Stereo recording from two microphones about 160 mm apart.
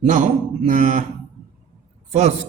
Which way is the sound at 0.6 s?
50° right (ahead or behind).